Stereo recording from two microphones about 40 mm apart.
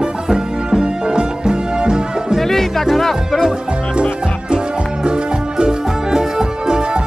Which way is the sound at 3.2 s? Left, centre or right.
Centre.